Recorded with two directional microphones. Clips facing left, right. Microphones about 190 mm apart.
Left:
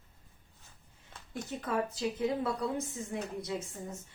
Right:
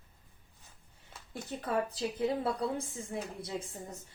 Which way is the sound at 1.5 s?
35° right (ahead or behind).